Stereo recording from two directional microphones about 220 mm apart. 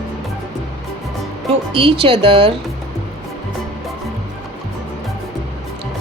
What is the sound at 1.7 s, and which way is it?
Speech, 25° right (ahead or behind).